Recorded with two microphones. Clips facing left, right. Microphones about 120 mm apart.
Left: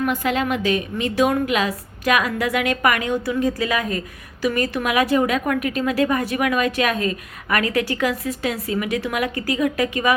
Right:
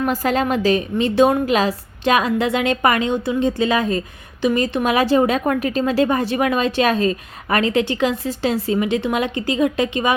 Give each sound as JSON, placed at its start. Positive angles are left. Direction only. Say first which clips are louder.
{"t": 0.0, "sound": "a woman's voice", "louder": "right 2 dB", "side_deg": -35}